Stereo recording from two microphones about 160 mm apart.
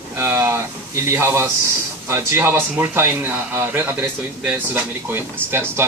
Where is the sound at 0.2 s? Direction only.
15° right (ahead or behind).